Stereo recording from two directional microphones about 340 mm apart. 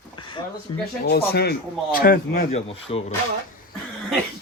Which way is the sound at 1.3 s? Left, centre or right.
Left.